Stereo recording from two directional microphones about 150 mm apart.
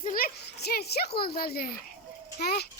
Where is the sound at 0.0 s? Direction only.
75° left (ahead or behind).